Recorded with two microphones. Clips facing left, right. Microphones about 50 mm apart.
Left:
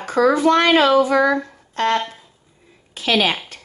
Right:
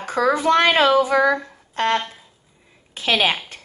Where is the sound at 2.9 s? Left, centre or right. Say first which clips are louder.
Left 1 dB; right.